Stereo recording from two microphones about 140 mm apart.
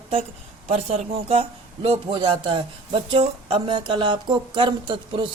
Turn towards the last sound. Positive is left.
turn(degrees=-35)  # may be behind; listen again after turning